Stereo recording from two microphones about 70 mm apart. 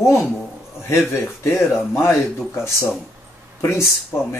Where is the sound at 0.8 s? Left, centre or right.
Left.